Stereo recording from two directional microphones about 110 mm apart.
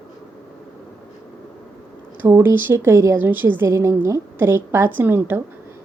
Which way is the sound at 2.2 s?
25° right (ahead or behind).